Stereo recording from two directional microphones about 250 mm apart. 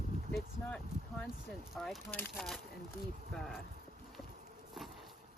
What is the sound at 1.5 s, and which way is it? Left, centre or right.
Speech, centre.